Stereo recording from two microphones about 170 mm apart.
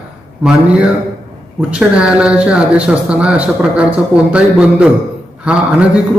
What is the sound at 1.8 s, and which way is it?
A man's voice, 5° right (ahead or behind).